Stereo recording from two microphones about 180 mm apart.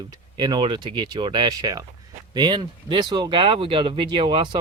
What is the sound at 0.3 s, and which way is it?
Speech, 25° right (ahead or behind).